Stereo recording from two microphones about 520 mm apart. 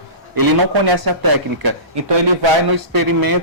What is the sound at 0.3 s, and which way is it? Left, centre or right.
A man's voice, right.